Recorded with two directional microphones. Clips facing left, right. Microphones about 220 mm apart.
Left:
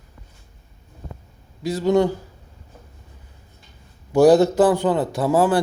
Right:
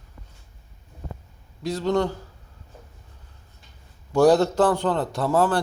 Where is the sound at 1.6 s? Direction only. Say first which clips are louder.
Left 5 dB; 5° left (ahead or behind).